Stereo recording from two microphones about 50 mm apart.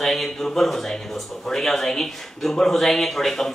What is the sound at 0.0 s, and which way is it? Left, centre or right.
Speech, centre.